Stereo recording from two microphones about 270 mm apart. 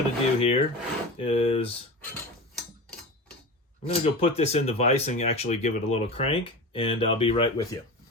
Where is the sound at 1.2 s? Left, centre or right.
Left.